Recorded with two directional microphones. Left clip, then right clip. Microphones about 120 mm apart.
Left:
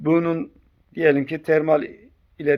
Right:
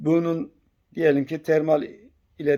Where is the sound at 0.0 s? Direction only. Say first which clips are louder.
Left 2 dB; 35° right (ahead or behind).